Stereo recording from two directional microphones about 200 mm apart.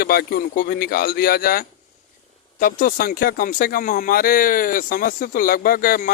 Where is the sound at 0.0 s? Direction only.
50° left (ahead or behind).